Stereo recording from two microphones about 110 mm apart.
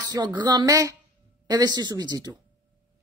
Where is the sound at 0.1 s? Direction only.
40° right (ahead or behind).